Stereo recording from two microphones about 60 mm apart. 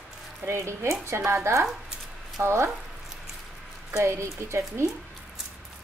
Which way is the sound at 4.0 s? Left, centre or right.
Right.